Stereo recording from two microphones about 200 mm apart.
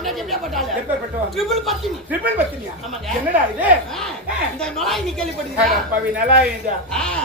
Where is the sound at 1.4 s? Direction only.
Centre (ahead or behind).